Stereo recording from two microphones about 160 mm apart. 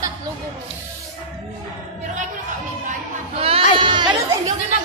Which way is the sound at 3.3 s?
35° right (ahead or behind).